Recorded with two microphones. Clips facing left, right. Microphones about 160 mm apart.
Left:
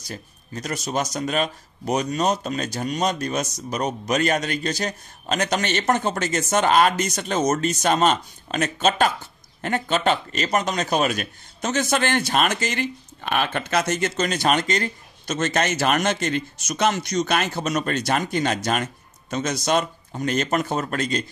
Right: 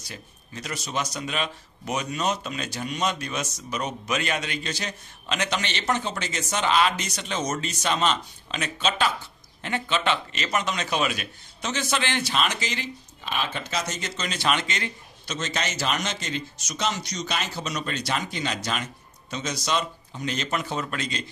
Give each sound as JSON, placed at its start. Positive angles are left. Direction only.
{"t": 0.0, "sound": "a man's voice", "side_deg": 40}